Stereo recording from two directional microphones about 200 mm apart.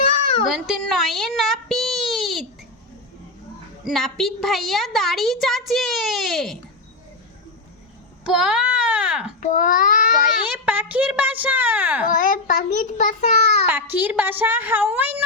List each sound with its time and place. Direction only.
0.4 s speech: centre (ahead or behind)
3.8 s a woman's voice: centre (ahead or behind)
8.2 s a sound: 5° right (ahead or behind)
9.4 s a child's voice: 40° left (ahead or behind)
10.7 s a child's voice: 5° right (ahead or behind)
12.0 s a child's voice: 40° left (ahead or behind)
13.7 s a child's voice: 10° right (ahead or behind)